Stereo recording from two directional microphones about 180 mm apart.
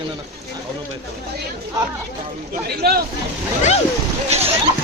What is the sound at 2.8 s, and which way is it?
Speech, 60° right (ahead or behind).